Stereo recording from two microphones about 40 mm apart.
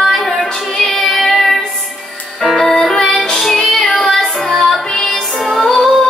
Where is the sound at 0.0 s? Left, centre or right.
Centre.